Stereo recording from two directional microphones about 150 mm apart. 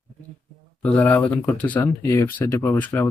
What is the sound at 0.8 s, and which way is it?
Speech, 10° left (ahead or behind).